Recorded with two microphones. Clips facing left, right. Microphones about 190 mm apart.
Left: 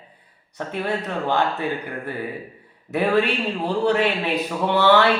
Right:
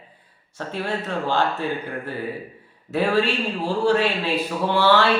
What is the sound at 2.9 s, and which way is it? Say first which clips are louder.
A man's voice: left 1 dB; 15° left (ahead or behind).